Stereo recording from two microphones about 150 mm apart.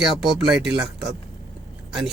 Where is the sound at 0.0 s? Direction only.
5° right (ahead or behind).